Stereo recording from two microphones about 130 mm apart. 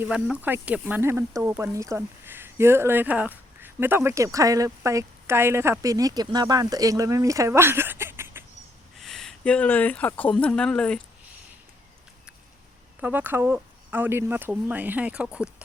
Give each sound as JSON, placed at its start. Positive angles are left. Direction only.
{"t": 0.0, "sound": "speech", "side_deg": -10}
{"t": 9.0, "sound": "speech", "side_deg": 0}
{"t": 13.0, "sound": "speech", "side_deg": -15}